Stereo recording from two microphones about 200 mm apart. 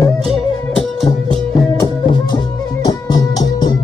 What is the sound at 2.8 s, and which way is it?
Music, 20° left (ahead or behind).